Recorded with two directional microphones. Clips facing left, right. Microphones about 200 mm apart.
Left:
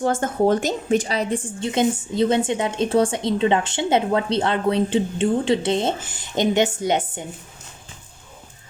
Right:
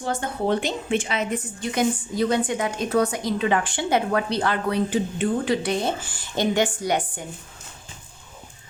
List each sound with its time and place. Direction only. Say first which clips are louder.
0.0 s a woman's voice: left 6 dB; 50° left (ahead or behind); by 7.3 s 20° left (ahead or behind)